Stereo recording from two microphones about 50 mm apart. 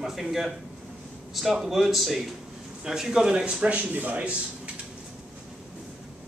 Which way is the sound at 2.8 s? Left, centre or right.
Centre.